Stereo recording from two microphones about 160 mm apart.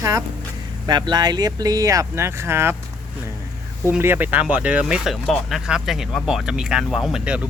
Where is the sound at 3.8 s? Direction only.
15° right (ahead or behind).